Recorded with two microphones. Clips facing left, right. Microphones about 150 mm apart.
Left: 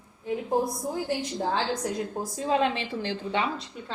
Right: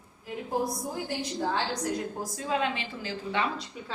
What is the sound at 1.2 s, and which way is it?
Speech, 25° left (ahead or behind).